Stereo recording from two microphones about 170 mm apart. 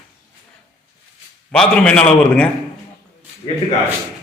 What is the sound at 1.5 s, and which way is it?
A man's voice, 5° left (ahead or behind).